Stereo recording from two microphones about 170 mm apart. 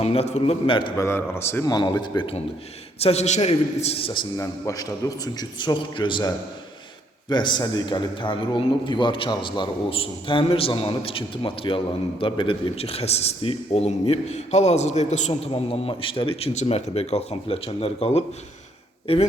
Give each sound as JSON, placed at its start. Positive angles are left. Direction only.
{"t": 0.0, "sound": "a man's voice", "side_deg": 35}
{"t": 1.0, "sound": "a man's voice", "side_deg": 15}
{"t": 4.4, "sound": "a man's voice", "side_deg": 20}